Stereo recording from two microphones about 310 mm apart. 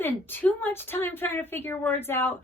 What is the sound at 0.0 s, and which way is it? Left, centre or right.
A woman's voice, centre.